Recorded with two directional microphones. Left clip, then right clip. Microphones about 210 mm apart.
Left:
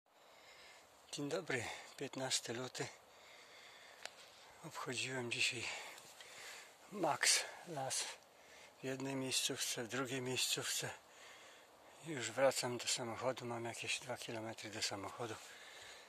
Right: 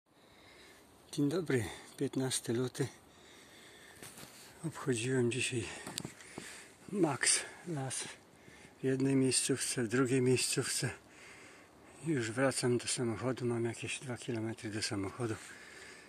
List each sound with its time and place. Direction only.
1.1 s speech: 10° left (ahead or behind)
4.6 s speech: centre (ahead or behind)
7.0 s speech: 15° left (ahead or behind)
12.1 s speech: 15° left (ahead or behind)